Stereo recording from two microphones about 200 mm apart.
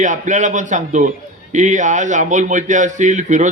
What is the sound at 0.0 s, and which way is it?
A man's voice, 40° right (ahead or behind).